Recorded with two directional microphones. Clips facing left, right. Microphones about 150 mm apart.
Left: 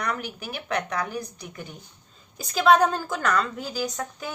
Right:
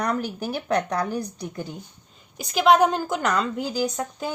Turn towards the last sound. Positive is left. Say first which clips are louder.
# right 4 dB
turn(degrees=-20)  # may be behind; listen again after turning